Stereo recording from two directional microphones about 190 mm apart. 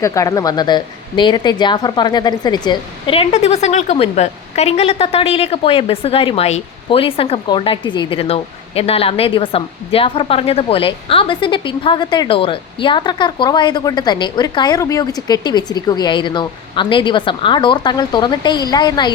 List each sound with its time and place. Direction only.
0.0 s speech: 15° left (ahead or behind)